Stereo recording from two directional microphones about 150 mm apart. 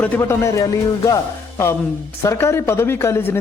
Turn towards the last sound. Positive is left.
turn(degrees=15)  # may be behind; listen again after turning